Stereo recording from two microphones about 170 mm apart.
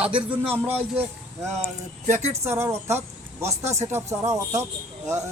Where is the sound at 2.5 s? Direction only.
15° right (ahead or behind).